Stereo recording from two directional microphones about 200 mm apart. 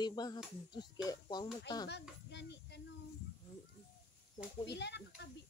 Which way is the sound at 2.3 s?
60° left (ahead or behind).